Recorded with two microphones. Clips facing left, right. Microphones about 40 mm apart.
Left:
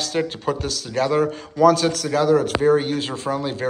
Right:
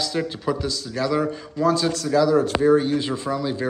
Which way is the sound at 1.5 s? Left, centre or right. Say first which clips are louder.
Left 5 dB; left.